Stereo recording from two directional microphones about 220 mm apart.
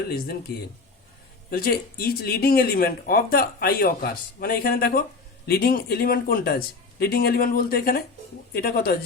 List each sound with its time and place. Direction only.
1.5 s speech: 40° left (ahead or behind)